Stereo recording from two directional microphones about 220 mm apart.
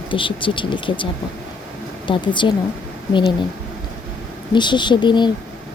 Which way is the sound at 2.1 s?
20° left (ahead or behind).